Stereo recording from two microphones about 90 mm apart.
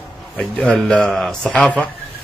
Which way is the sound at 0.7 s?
15° left (ahead or behind).